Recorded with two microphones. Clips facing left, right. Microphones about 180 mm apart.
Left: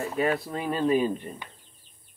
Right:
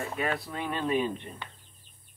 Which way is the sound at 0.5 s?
35° left (ahead or behind).